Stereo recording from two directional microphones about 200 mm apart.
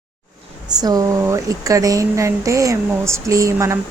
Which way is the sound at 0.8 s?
20° right (ahead or behind).